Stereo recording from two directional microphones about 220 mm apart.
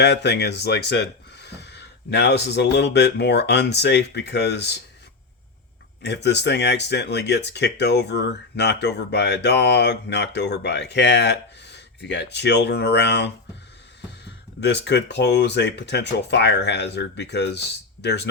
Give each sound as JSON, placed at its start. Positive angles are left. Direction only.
{"t": 0.0, "sound": "speech", "side_deg": 50}
{"t": 6.0, "sound": "speech", "side_deg": 50}
{"t": 14.6, "sound": "speech", "side_deg": 50}